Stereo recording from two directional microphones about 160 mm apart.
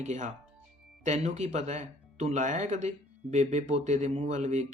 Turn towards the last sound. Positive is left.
turn(degrees=-45)  # may be behind; listen again after turning